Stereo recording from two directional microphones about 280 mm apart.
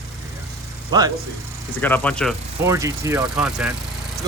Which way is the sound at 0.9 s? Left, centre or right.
Centre.